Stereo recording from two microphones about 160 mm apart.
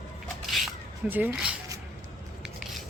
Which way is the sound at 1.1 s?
10° right (ahead or behind).